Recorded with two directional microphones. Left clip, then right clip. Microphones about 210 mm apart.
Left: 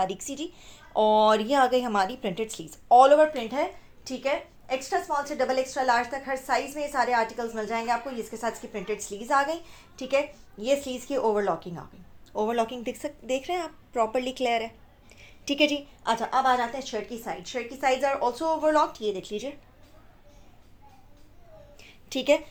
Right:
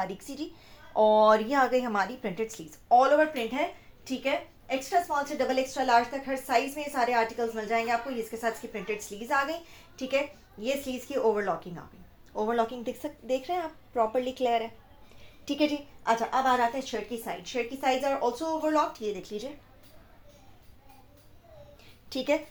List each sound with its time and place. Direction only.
0.0 s a woman's voice: 45° left (ahead or behind)
4.8 s a woman's voice: 40° left (ahead or behind)
21.8 s a sound: 40° left (ahead or behind)